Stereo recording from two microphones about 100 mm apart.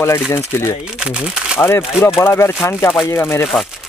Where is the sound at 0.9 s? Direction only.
10° right (ahead or behind).